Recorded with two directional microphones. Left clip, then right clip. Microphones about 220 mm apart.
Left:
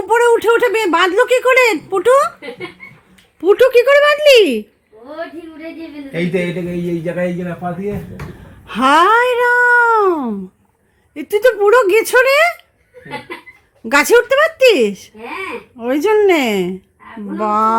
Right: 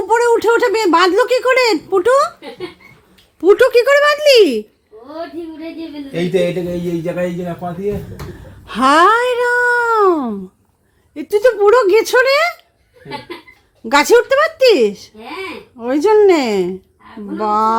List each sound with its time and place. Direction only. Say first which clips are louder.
0.1 s speech: left 1 dB; 10° right (ahead or behind)
3.4 s speech: even; 5° right (ahead or behind)
6.1 s speech: right 3 dB; 50° right (ahead or behind)
8.6 s speech: right 1 dB; centre (ahead or behind)
13.8 s speech: even; centre (ahead or behind)